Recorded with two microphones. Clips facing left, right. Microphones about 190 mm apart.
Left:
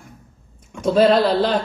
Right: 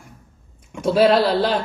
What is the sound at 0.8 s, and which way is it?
Speech, 10° right (ahead or behind).